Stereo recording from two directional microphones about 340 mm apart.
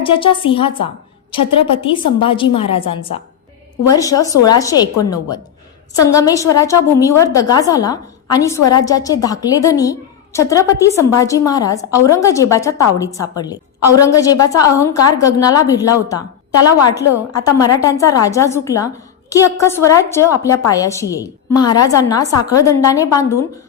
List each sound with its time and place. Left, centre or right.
1.4 s a woman's voice: left
1.7 s a woman's voice: centre
13.7 s a woman's voice: left
14.0 s a woman's voice: centre